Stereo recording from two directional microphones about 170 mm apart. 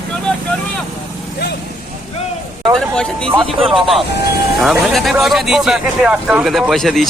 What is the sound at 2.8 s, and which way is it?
Speech, 5° left (ahead or behind).